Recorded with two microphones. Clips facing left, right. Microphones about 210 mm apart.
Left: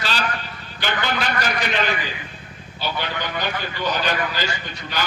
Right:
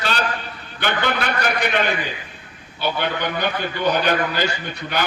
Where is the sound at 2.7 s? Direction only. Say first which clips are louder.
Right 4 dB; 55° right (ahead or behind).